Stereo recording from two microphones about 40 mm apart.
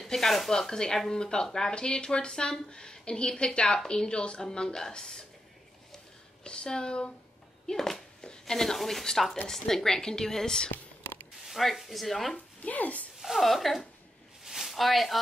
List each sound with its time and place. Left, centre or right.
0.0 s speech: centre
6.4 s speech: left
7.6 s a sound: centre
8.5 s a woman's voice: centre
11.4 s speech: centre
12.6 s speech: left
13.2 s speech: centre
14.4 s a sound: centre